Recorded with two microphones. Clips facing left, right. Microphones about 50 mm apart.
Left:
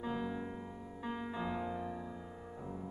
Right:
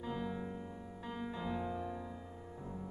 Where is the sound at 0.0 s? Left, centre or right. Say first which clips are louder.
Left 2 dB; centre.